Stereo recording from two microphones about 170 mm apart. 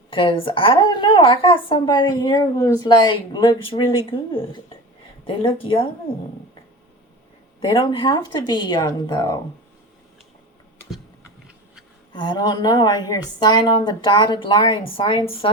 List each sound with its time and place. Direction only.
0.1 s a woman's voice: 30° left (ahead or behind)
7.8 s a woman's voice: 25° left (ahead or behind)
11.4 s a sound: 5° right (ahead or behind)
12.1 s a woman's voice: 25° left (ahead or behind)